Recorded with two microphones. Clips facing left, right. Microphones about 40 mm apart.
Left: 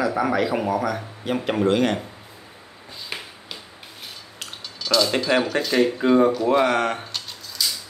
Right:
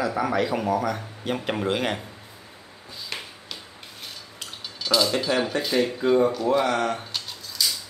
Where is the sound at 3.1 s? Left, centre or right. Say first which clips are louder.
Left 1 dB; centre.